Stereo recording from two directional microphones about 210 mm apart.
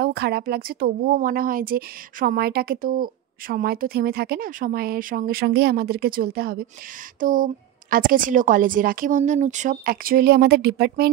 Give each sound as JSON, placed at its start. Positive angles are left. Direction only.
{"t": 0.0, "sound": "a woman's voice", "side_deg": -50}